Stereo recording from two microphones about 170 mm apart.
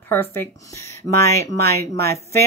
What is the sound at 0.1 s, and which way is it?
A woman's voice, 15° left (ahead or behind).